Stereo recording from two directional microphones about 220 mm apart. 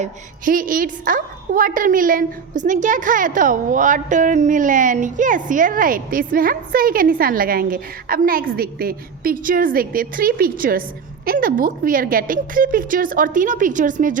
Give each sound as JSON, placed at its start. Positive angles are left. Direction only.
{"t": 0.0, "sound": "a woman's voice", "side_deg": -40}